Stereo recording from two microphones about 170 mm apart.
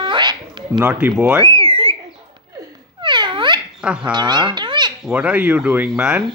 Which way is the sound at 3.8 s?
5° right (ahead or behind).